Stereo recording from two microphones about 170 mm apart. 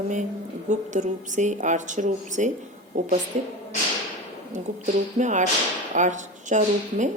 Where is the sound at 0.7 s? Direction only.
45° right (ahead or behind).